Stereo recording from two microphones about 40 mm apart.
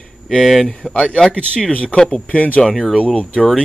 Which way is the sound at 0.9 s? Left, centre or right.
Left.